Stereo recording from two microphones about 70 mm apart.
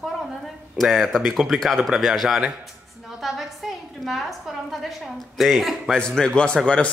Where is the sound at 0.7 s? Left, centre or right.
Centre.